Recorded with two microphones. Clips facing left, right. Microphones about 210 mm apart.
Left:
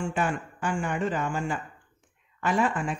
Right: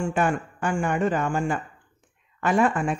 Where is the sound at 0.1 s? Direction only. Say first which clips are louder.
Right 4 dB; 50° right (ahead or behind).